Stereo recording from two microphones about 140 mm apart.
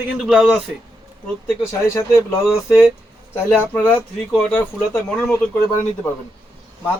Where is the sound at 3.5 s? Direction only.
10° left (ahead or behind).